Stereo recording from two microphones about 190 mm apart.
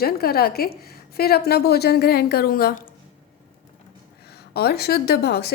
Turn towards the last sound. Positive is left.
turn(degrees=60)  # may be behind; listen again after turning